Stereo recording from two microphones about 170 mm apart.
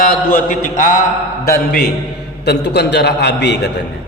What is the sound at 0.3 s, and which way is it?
Speech, 50° left (ahead or behind).